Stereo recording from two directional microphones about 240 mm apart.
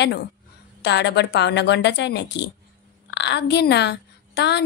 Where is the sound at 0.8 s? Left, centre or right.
Left.